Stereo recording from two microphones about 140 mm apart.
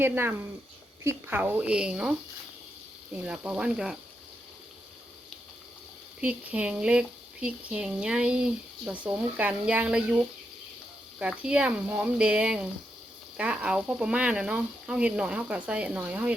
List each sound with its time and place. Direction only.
0.0 s speech: 15° right (ahead or behind)
3.2 s speech: 10° right (ahead or behind)
6.1 s speech: 10° right (ahead or behind)